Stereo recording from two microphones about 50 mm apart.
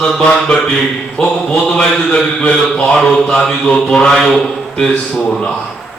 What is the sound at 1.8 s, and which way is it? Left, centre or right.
A man's voice, centre.